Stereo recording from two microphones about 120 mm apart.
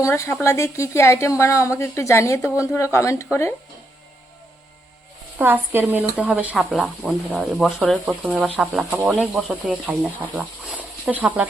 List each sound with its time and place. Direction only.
0.0 s a woman's voice: 20° left (ahead or behind)
5.4 s speech: 15° right (ahead or behind)
6.7 s speech: centre (ahead or behind)
10.8 s a sound: 10° right (ahead or behind)